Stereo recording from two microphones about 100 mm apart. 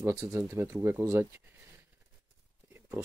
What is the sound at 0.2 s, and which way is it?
Speech, 25° right (ahead or behind).